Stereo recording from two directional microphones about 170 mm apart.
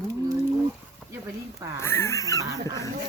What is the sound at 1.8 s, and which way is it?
Dog, 15° left (ahead or behind).